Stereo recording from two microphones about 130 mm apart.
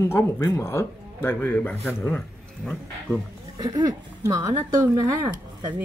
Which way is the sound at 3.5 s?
30° right (ahead or behind).